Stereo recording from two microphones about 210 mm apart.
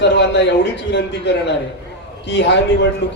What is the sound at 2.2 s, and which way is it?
Speech, 55° left (ahead or behind).